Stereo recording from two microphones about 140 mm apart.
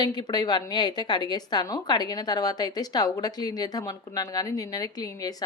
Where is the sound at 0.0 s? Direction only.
30° left (ahead or behind).